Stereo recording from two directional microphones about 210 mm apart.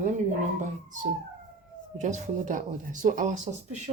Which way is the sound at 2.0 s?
35° right (ahead or behind).